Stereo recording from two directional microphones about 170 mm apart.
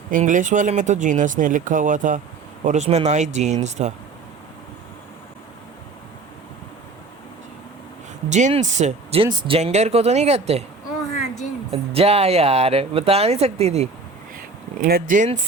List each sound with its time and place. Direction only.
0.1 s speech: 50° right (ahead or behind)
8.3 s speech: 45° right (ahead or behind)
11.7 s speech: 35° right (ahead or behind)
14.8 s speech: 60° right (ahead or behind)